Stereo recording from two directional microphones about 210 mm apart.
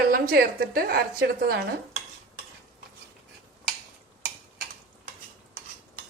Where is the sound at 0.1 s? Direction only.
45° right (ahead or behind).